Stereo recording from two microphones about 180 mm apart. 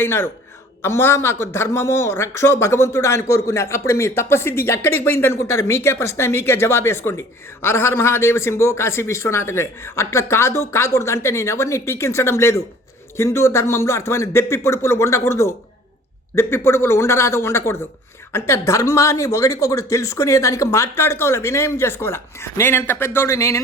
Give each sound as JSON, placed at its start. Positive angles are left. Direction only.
{"t": 0.0, "sound": "speech", "side_deg": 15}